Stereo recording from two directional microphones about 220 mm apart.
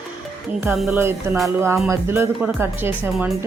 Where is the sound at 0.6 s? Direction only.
5° right (ahead or behind).